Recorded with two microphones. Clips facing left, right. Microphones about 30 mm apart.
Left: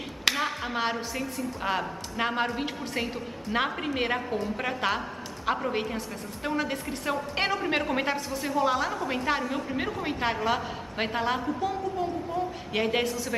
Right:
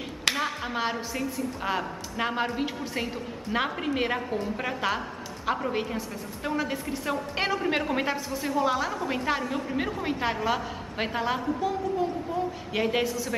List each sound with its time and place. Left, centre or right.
0.4 s a woman's voice: centre